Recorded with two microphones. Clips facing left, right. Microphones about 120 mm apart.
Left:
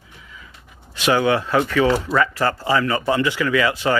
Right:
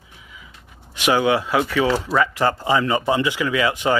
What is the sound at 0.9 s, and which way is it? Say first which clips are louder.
Speech: even; 15° right (ahead or behind).